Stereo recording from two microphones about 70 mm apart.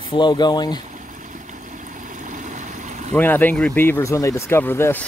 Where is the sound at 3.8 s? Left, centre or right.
Left.